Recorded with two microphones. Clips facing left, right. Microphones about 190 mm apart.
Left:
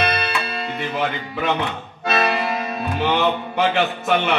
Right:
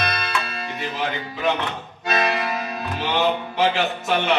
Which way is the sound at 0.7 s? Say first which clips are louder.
Left 2 dB; 60° left (ahead or behind).